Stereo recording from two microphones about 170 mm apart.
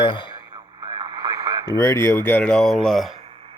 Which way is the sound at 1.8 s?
15° left (ahead or behind).